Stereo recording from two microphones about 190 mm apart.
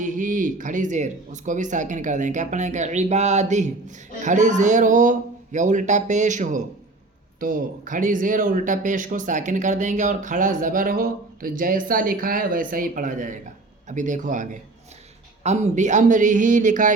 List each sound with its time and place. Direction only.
0.0 s speech: 45° right (ahead or behind)